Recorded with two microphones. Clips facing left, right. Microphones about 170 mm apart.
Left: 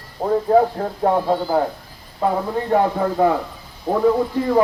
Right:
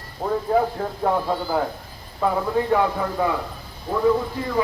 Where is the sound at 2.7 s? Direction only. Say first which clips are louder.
Left 3 dB; 40° left (ahead or behind).